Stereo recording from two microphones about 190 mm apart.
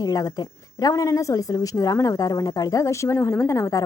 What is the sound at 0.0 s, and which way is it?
A woman's voice, 20° left (ahead or behind).